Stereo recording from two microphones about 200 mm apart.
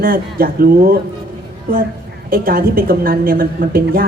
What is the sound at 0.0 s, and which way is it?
Speech, 45° right (ahead or behind).